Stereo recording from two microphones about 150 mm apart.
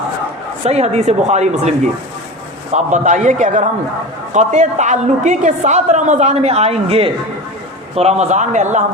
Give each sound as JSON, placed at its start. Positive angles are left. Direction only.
{"t": 0.6, "sound": "a woman's voice", "side_deg": -45}
{"t": 2.7, "sound": "a man's voice", "side_deg": -55}